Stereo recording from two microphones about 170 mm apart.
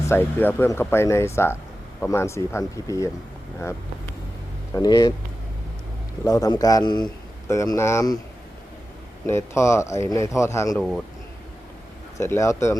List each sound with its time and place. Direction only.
0.1 s a man's voice: 10° left (ahead or behind)
6.2 s a man's voice: 20° left (ahead or behind)
9.2 s speech: 15° left (ahead or behind)
10.8 s speech: 5° left (ahead or behind)
12.1 s speech: 15° left (ahead or behind)